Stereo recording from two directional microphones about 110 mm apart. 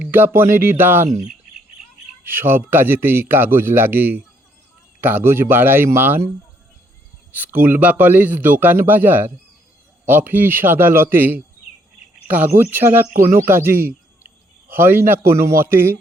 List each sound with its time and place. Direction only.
0.0 s speech: 15° right (ahead or behind)
1.0 s speech: 35° right (ahead or behind)
2.2 s a man's voice: 20° right (ahead or behind)